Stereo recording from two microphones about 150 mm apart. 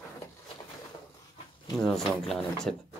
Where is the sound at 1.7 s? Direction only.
5° left (ahead or behind).